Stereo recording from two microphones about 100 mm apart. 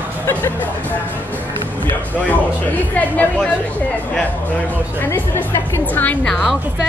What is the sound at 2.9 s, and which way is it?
Speech, 15° left (ahead or behind).